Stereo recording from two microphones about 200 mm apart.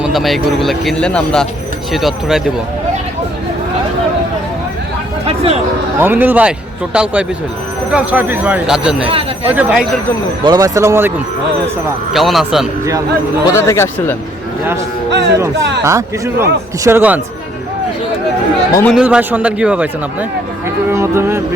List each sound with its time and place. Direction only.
0.0 s speech: centre (ahead or behind)
5.2 s a sound: 30° right (ahead or behind)
6.0 s speech: 10° right (ahead or behind)
9.0 s speech: 30° right (ahead or behind)
9.5 s speech: 5° right (ahead or behind)
10.4 s speech: 20° right (ahead or behind)
12.1 s speech: centre (ahead or behind)
13.4 s speech: 15° left (ahead or behind)
15.8 s speech: 15° right (ahead or behind)
18.7 s speech: 10° left (ahead or behind)
18.9 s speech: 5° right (ahead or behind)